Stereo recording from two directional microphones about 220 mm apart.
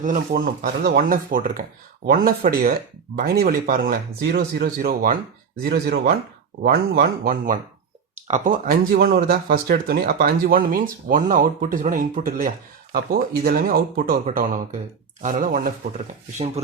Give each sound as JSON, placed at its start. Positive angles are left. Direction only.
{"t": 0.0, "sound": "speech", "side_deg": -40}